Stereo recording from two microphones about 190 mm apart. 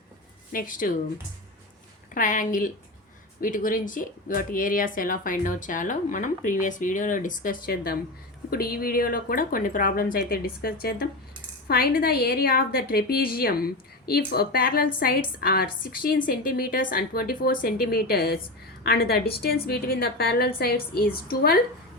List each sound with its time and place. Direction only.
0.5 s speech: 45° left (ahead or behind)
2.1 s speech: 45° left (ahead or behind)